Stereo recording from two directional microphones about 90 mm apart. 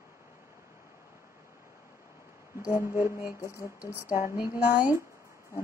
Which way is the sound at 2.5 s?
30° right (ahead or behind).